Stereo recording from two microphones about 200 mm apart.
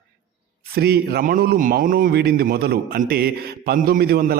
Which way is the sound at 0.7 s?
50° right (ahead or behind).